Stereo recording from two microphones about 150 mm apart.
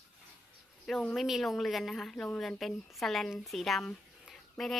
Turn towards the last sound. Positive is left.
turn(degrees=0)  # may be behind; listen again after turning